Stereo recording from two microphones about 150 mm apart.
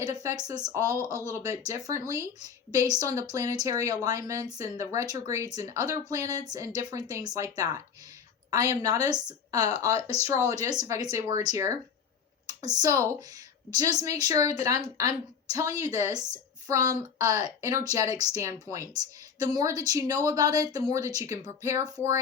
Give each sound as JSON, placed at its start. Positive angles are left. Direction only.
{"t": 0.0, "sound": "a woman's voice", "side_deg": -25}